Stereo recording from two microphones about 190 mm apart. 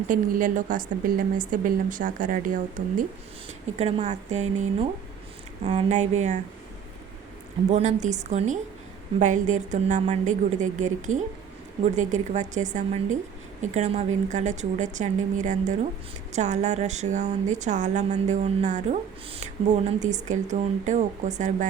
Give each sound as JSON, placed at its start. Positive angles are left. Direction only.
{"t": 0.1, "sound": "a woman's voice", "side_deg": -45}
{"t": 3.8, "sound": "a woman's voice", "side_deg": -35}
{"t": 7.7, "sound": "a woman's voice", "side_deg": -40}